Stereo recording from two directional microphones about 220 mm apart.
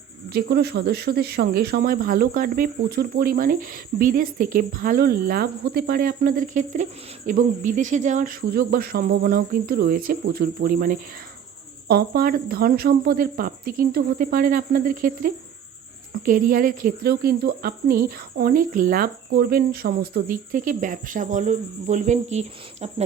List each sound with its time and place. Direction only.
0.3 s speech: 45° right (ahead or behind); by 23.0 s 30° right (ahead or behind)